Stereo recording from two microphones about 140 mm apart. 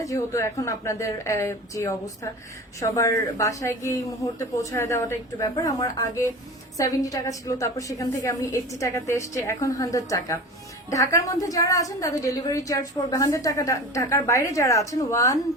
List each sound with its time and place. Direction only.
0.0 s a woman's voice: 25° left (ahead or behind)